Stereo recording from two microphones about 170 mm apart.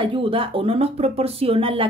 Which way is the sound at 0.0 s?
30° right (ahead or behind).